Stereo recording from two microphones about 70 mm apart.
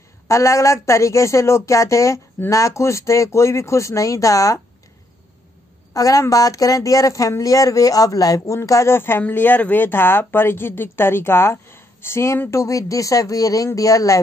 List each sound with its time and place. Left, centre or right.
0.3 s speech: left
5.9 s speech: left
8.6 s speech: left